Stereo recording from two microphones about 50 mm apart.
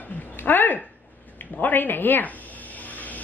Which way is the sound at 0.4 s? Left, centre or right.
Left.